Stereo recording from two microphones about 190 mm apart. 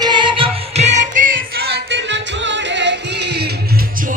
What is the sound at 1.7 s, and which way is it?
Music, 65° right (ahead or behind).